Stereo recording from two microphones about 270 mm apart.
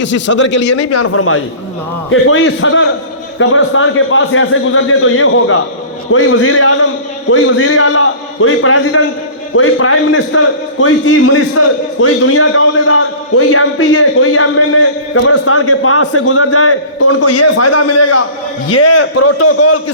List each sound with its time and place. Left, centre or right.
0.0 s speech: left
0.9 s a man's voice: left